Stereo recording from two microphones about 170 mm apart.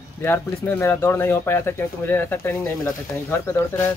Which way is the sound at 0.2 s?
10° left (ahead or behind).